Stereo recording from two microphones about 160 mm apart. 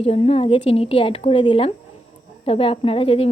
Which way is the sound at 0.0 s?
40° left (ahead or behind).